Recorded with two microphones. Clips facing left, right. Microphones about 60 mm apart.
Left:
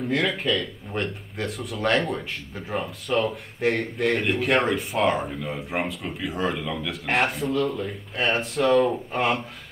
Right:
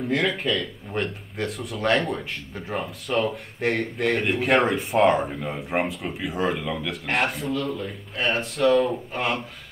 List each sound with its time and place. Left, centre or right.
0.0 s speech: centre